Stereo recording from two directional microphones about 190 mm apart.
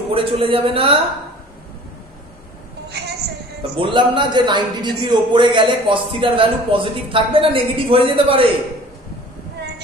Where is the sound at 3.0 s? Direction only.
60° right (ahead or behind).